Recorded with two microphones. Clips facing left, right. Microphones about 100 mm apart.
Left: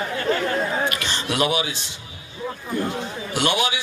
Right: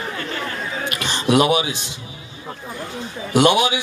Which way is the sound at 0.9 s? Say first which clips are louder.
Right 7 dB; 20° right (ahead or behind).